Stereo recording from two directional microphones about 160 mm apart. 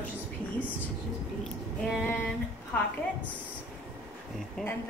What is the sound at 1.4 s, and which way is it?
Speech, 5° right (ahead or behind).